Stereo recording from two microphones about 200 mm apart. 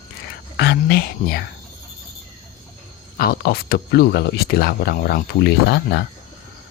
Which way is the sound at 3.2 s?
50° left (ahead or behind).